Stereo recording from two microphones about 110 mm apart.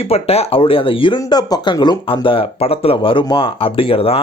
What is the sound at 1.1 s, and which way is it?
Speech, 40° left (ahead or behind).